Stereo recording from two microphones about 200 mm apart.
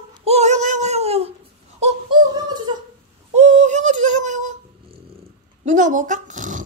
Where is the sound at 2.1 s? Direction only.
20° right (ahead or behind).